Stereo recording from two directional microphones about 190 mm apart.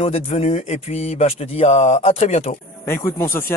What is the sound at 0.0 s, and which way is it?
Speech, 35° left (ahead or behind).